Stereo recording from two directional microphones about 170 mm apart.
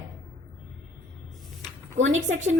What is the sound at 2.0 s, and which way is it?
Speech, 45° right (ahead or behind).